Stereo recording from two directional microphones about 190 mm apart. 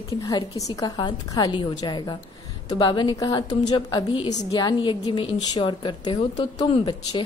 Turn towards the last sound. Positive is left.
turn(degrees=25)  # may be behind; listen again after turning